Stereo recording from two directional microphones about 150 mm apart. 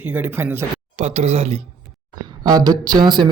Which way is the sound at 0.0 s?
15° right (ahead or behind).